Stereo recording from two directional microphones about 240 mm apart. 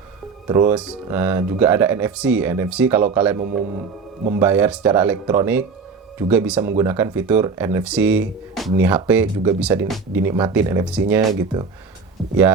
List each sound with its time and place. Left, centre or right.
0.4 s speech: centre